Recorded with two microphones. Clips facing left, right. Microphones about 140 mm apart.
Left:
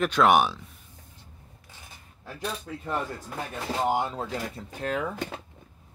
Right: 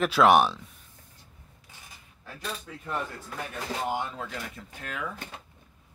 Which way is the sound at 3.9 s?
35° left (ahead or behind).